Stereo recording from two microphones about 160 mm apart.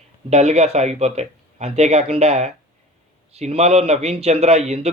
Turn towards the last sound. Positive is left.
turn(degrees=-40)  # may be behind; listen again after turning